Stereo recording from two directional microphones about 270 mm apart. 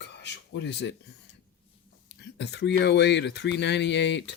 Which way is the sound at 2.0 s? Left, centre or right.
Left.